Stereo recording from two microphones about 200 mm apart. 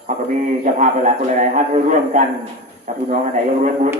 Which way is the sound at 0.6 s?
40° right (ahead or behind).